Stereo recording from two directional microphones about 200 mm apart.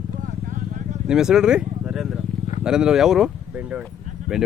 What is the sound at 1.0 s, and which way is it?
Speech, 5° right (ahead or behind).